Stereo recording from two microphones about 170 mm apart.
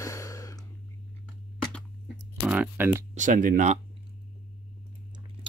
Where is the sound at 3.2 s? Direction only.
50° right (ahead or behind).